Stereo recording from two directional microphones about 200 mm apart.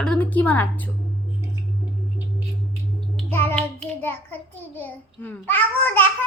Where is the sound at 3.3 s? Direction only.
10° left (ahead or behind).